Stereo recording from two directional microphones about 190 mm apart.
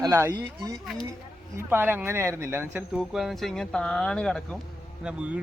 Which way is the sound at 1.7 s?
10° right (ahead or behind).